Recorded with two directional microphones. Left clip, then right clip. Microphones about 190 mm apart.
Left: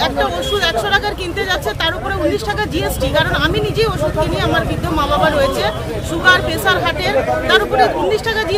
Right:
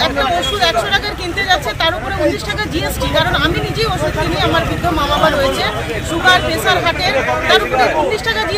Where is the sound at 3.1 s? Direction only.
30° left (ahead or behind).